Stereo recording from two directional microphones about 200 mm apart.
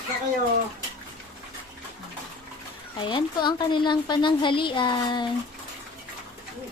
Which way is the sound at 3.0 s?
20° left (ahead or behind).